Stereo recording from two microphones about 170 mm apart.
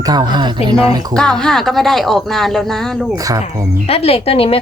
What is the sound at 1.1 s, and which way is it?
Speech, 5° left (ahead or behind).